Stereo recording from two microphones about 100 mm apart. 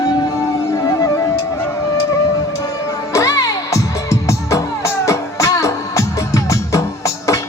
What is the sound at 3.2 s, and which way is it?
Music, 35° left (ahead or behind).